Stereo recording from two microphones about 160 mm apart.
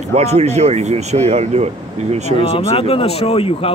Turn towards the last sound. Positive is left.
turn(degrees=35)  # may be behind; listen again after turning